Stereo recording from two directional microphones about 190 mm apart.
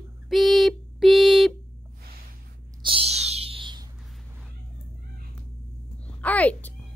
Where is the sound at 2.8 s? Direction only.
30° right (ahead or behind).